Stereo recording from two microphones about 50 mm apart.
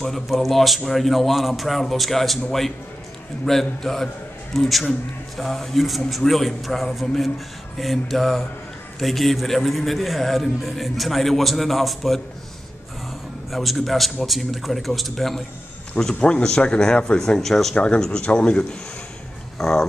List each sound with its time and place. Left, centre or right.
0.0 s a man's voice: centre
3.4 s a man's voice: centre
13.5 s a man's voice: centre
16.2 s speech: left; by 17.7 s centre
17.7 s speech: centre
19.6 s speech: centre